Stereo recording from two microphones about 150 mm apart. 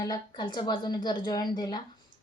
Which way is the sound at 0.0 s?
30° left (ahead or behind).